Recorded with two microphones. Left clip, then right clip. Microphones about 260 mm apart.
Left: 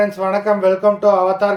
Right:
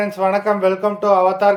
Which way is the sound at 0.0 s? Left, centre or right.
Centre.